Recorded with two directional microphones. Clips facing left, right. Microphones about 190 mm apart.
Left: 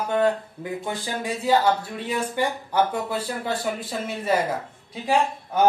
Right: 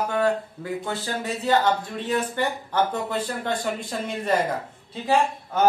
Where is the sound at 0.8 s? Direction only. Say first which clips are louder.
Left 1 dB; 15° left (ahead or behind).